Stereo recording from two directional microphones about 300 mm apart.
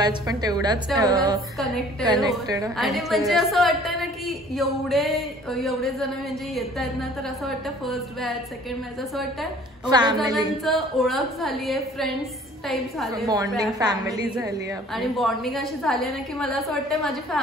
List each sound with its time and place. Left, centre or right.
0.0 s a woman's voice: centre
2.7 s a woman's voice: centre
9.8 s a woman's voice: centre
10.3 s a woman's voice: centre
13.1 s a woman's voice: centre
15.0 s a woman's voice: centre